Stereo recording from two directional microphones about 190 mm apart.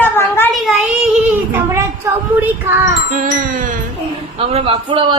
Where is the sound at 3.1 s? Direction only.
45° right (ahead or behind).